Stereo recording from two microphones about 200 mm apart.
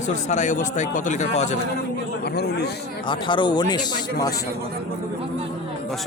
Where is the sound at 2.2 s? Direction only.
55° left (ahead or behind).